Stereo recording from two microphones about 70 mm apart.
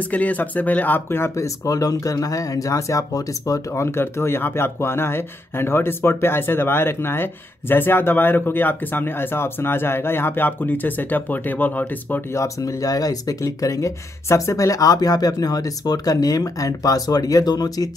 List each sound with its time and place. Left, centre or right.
0.1 s speech: left
3.8 s speech: left
12.4 s speech: left